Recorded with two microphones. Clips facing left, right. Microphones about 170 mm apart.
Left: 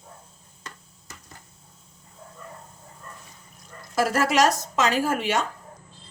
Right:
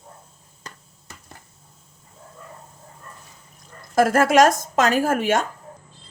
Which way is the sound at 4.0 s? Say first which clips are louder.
Right 5 dB; 50° right (ahead or behind).